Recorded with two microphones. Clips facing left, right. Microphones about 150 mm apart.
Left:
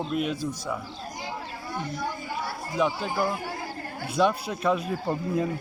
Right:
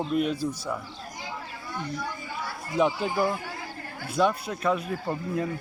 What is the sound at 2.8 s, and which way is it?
Speech, 5° right (ahead or behind).